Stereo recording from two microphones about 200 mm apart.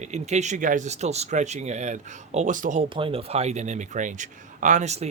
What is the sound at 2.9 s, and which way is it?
Speech, 25° right (ahead or behind).